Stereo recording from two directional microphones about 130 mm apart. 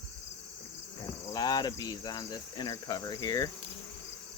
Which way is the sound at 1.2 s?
30° left (ahead or behind).